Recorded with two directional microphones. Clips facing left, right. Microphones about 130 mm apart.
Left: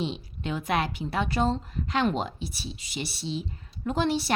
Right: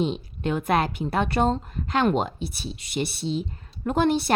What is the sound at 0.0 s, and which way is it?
A woman's voice, 50° right (ahead or behind).